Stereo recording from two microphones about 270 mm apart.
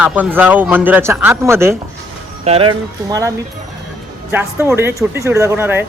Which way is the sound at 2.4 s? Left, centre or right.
Right.